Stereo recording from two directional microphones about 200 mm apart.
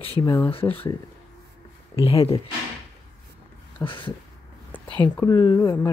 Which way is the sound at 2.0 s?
30° left (ahead or behind).